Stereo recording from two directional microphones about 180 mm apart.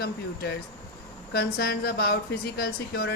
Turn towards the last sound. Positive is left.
turn(degrees=60)  # may be behind; listen again after turning